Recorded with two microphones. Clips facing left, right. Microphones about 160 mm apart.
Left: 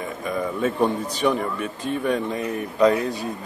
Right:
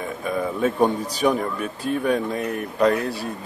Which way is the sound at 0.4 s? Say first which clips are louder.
Right 2 dB; 10° right (ahead or behind).